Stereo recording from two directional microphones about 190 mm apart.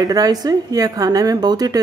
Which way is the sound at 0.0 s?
20° right (ahead or behind).